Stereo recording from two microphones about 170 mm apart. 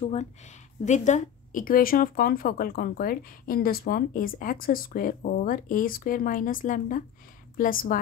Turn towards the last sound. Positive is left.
turn(degrees=55)  # may be behind; listen again after turning